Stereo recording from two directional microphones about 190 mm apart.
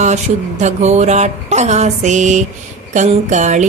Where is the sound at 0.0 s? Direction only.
40° right (ahead or behind).